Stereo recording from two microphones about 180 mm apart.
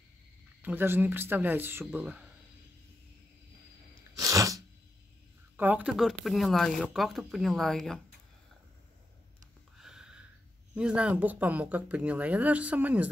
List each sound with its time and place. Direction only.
0.6 s speech: 10° right (ahead or behind)
4.2 s sneeze: 20° right (ahead or behind)
5.6 s speech: 10° right (ahead or behind)
9.8 s a sound: 5° right (ahead or behind)
10.7 s speech: 5° right (ahead or behind)